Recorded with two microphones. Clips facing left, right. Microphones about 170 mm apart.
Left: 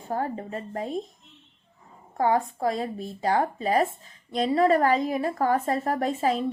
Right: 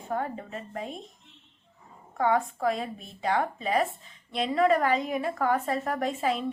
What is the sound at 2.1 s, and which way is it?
Speech, 35° left (ahead or behind).